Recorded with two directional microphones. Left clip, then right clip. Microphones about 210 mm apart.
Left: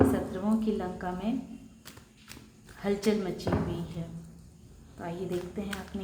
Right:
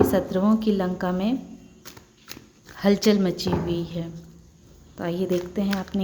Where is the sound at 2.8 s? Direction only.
45° right (ahead or behind).